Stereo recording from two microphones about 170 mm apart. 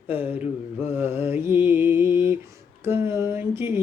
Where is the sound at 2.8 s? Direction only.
15° right (ahead or behind).